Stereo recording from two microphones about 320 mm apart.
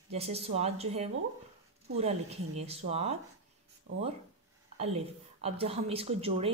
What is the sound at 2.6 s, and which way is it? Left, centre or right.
Speech, centre.